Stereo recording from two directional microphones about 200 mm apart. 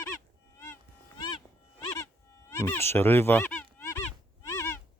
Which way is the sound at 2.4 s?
15° left (ahead or behind).